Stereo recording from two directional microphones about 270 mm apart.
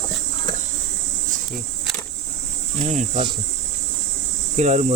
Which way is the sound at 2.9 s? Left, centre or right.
Centre.